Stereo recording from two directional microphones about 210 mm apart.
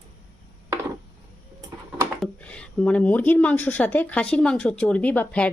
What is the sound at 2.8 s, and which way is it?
Speech, 5° left (ahead or behind).